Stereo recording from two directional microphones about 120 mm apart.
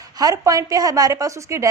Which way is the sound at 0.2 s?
30° right (ahead or behind).